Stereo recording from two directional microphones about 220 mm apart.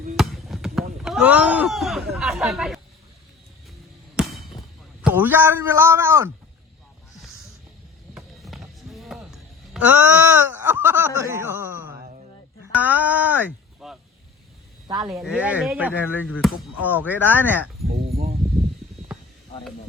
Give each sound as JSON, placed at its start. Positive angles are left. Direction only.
{"t": 0.2, "sound": "basketball bounce", "side_deg": 0}
{"t": 1.0, "sound": "speech", "side_deg": -5}
{"t": 4.2, "sound": "basketball bounce", "side_deg": 0}
{"t": 5.0, "sound": "a man's voice", "side_deg": -10}
{"t": 8.1, "sound": "music", "side_deg": 0}
{"t": 12.7, "sound": "speech", "side_deg": -5}
{"t": 14.8, "sound": "speech", "side_deg": -15}
{"t": 15.2, "sound": "a man's voice", "side_deg": -5}
{"t": 16.2, "sound": "speech", "side_deg": 5}
{"t": 17.8, "sound": "a sound", "side_deg": -45}